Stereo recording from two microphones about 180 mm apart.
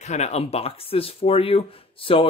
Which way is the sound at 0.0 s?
40° left (ahead or behind).